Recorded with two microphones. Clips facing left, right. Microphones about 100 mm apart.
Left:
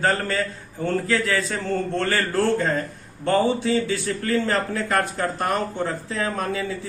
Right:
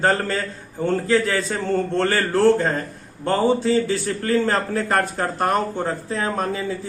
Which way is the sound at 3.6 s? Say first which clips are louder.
Right 3 dB; 35° right (ahead or behind).